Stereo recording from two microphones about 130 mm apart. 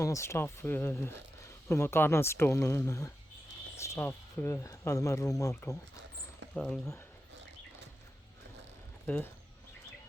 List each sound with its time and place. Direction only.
0.0 s speech: 20° left (ahead or behind)
6.5 s speech: 5° left (ahead or behind)
9.0 s speech: 15° left (ahead or behind)